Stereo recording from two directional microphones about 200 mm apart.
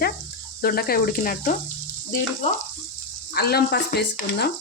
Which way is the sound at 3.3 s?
50° left (ahead or behind).